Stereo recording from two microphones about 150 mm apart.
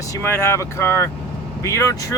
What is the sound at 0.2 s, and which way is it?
Speech, 15° left (ahead or behind).